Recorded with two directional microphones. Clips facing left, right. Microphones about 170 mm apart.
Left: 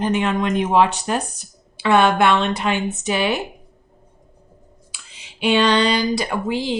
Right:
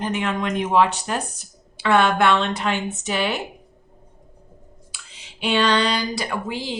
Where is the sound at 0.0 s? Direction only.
25° left (ahead or behind).